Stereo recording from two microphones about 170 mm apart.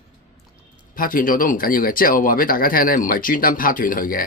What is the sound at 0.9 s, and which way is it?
A man's voice, 55° left (ahead or behind).